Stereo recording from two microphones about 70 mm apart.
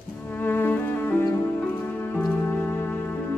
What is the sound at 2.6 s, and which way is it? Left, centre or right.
Music, left.